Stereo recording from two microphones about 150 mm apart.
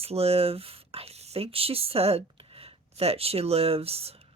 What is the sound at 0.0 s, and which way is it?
Speech, 40° right (ahead or behind).